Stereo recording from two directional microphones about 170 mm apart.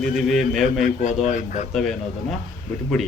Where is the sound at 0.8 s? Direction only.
45° left (ahead or behind).